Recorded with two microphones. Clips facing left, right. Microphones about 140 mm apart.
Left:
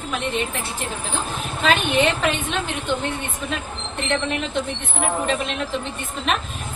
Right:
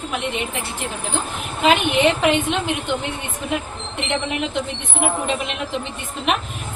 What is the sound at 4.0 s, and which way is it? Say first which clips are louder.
A woman's voice: even; 15° right (ahead or behind).